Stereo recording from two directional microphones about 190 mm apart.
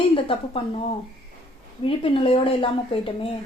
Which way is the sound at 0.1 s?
30° left (ahead or behind).